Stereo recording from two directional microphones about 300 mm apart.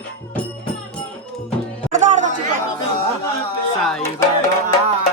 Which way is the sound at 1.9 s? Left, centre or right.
Right.